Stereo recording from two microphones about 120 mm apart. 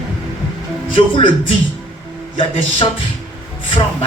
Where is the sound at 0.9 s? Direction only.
45° left (ahead or behind).